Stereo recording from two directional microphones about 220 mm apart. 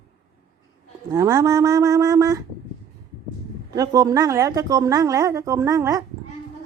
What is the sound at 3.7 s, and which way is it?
A woman's voice, 15° right (ahead or behind).